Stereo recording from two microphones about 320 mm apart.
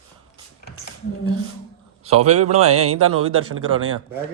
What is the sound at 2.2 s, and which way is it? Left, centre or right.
Speech, centre.